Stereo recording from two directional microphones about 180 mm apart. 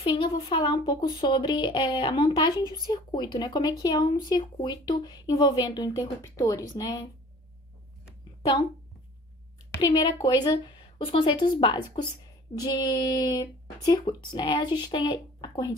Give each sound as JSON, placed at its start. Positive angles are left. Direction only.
{"t": 0.0, "sound": "speech", "side_deg": 30}
{"t": 9.8, "sound": "speech", "side_deg": 25}